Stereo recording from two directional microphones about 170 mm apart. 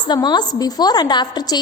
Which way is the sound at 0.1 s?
25° left (ahead or behind).